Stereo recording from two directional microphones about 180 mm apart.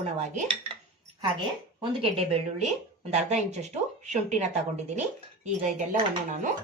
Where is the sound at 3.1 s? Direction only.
40° right (ahead or behind).